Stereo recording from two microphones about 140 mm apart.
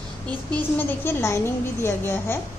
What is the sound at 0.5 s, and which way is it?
A woman's voice, 15° left (ahead or behind).